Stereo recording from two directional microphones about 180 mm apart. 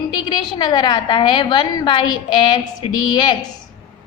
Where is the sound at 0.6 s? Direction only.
25° left (ahead or behind).